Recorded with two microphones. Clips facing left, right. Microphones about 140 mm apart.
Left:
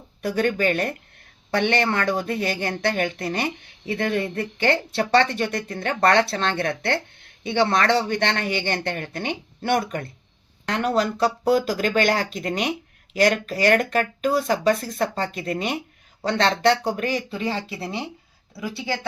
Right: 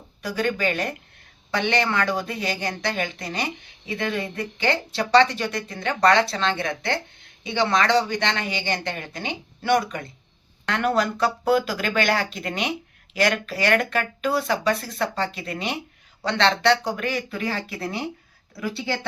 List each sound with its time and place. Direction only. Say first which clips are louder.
0.2 s a woman's voice: left 3 dB; 55° left (ahead or behind)
10.8 s a woman's voice: left 1 dB; 35° left (ahead or behind)
17.0 s speech: left 2 dB; 35° left (ahead or behind)